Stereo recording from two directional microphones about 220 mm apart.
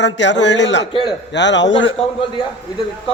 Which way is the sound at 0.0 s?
55° left (ahead or behind).